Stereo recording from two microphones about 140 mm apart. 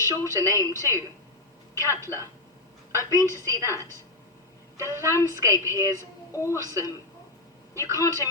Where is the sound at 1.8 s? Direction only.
20° left (ahead or behind).